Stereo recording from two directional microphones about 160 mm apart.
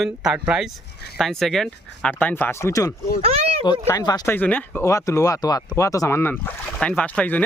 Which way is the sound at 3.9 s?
25° left (ahead or behind).